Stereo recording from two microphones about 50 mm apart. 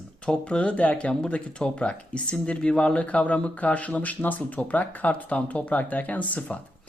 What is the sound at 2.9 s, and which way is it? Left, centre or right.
Speech, left.